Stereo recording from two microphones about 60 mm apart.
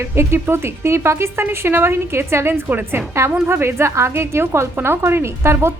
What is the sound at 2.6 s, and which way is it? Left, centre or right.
A woman's voice, right.